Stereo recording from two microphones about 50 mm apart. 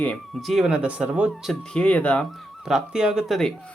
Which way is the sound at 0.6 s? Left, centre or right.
Centre.